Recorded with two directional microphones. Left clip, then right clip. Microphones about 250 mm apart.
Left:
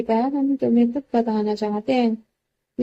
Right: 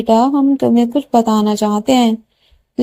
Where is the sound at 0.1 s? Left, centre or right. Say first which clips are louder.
Right 10 dB; right.